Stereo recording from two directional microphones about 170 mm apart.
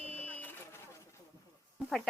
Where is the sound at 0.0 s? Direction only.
35° right (ahead or behind).